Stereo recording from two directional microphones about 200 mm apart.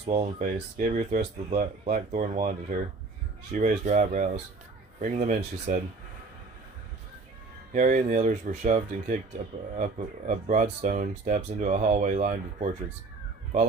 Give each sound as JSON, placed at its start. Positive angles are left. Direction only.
{"t": 0.0, "sound": "speech", "side_deg": -30}
{"t": 7.7, "sound": "speech", "side_deg": -40}